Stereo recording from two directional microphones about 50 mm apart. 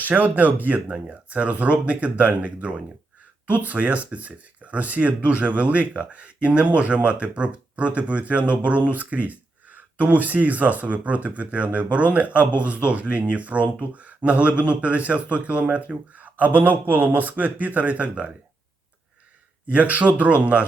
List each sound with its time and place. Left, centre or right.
0.0 s speech: right
19.7 s speech: right